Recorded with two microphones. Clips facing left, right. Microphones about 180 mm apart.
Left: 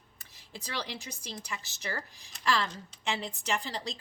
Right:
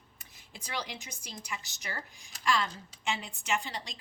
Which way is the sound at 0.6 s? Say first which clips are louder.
Left 1 dB; 35° left (ahead or behind).